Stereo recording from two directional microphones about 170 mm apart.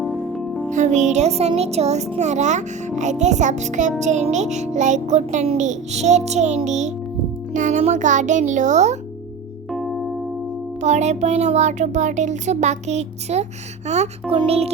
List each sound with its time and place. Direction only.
0.0 s music: centre (ahead or behind)
0.7 s speech: 45° right (ahead or behind)
9.7 s music: centre (ahead or behind)
10.8 s speech: 45° right (ahead or behind)